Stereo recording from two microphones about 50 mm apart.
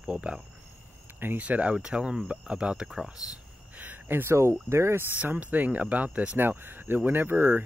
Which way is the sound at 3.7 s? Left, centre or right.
Right.